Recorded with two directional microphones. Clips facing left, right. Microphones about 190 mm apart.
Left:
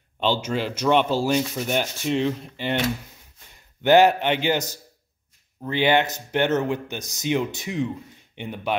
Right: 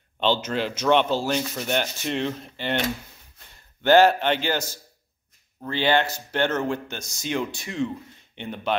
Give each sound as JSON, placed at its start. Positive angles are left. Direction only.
{"t": 0.2, "sound": "sanding", "side_deg": 10}
{"t": 3.8, "sound": "sanding", "side_deg": 15}